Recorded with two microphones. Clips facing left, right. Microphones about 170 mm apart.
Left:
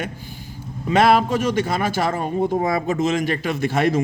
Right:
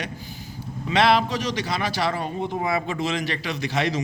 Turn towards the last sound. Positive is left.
turn(degrees=50)  # may be behind; listen again after turning